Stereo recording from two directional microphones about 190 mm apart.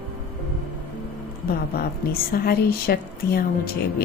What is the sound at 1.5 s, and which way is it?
A woman's voice, 55° left (ahead or behind).